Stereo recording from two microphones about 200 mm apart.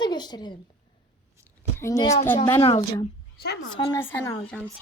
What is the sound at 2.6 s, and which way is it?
A child's voice, 25° left (ahead or behind).